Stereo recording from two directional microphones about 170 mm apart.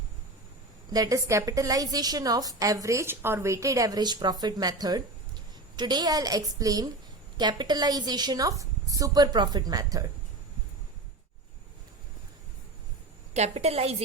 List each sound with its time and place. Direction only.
0.9 s a woman's voice: 20° right (ahead or behind)
13.3 s a woman's voice: 40° right (ahead or behind)